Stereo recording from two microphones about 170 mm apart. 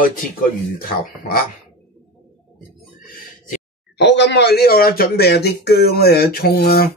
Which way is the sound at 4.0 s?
90° left.